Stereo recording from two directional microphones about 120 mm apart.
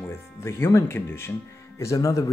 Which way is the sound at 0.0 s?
20° left (ahead or behind).